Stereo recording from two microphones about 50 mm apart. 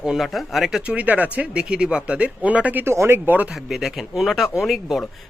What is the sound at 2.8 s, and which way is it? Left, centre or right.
Speech, right.